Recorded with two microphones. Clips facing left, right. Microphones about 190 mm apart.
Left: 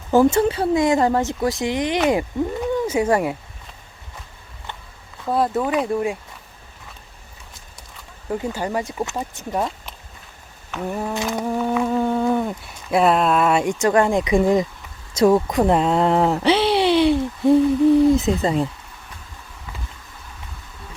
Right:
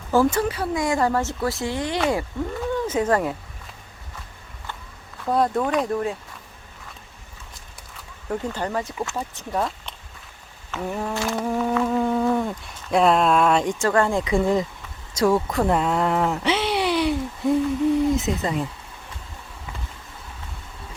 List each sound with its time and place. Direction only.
0.1 s speech: 20° left (ahead or behind)
5.2 s speech: 5° left (ahead or behind)
8.3 s speech: 10° left (ahead or behind)
10.8 s speech: centre (ahead or behind)
11.1 s speech: 20° left (ahead or behind)
11.4 s speech: centre (ahead or behind); by 18.7 s 30° left (ahead or behind)